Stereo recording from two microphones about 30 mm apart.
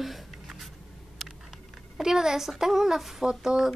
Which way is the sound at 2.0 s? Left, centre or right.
Centre.